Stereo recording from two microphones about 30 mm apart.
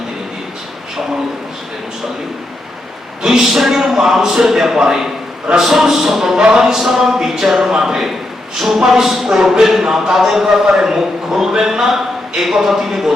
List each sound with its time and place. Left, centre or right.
3.4 s a man's voice: centre
6.5 s a sound: centre
6.7 s a man's voice: centre
8.5 s a man's voice: centre